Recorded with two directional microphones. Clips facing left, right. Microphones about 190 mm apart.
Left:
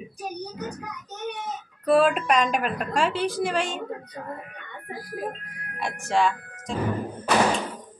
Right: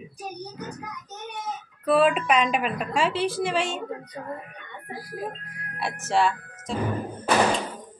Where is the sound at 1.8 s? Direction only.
Centre (ahead or behind).